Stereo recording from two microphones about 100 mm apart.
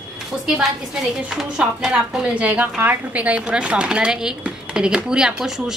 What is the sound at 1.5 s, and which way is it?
A woman's voice, 10° right (ahead or behind).